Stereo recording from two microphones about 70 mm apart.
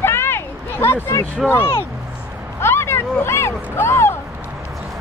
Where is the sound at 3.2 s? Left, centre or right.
Left.